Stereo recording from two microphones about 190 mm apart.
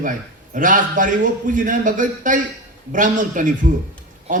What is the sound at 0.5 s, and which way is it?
A man's voice, 45° right (ahead or behind).